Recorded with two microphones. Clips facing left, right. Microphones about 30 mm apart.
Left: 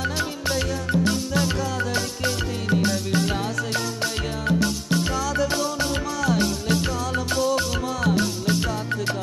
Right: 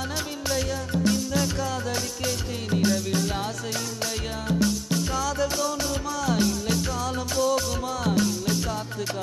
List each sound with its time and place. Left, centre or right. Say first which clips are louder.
5.1 s music: left 2 dB; centre
7.3 s music: even; left